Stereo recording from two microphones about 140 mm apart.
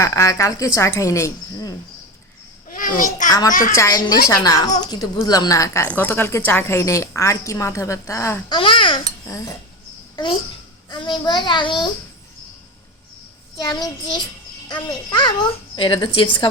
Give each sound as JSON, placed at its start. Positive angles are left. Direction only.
{"t": 0.0, "sound": "a woman's voice", "side_deg": 20}
{"t": 2.6, "sound": "a child's voice", "side_deg": 75}
{"t": 3.8, "sound": "a woman's voice", "side_deg": 25}
{"t": 8.5, "sound": "a child's voice", "side_deg": 35}
{"t": 9.2, "sound": "a woman's voice", "side_deg": 20}
{"t": 10.8, "sound": "a child's voice", "side_deg": 35}
{"t": 13.7, "sound": "a woman's voice", "side_deg": 30}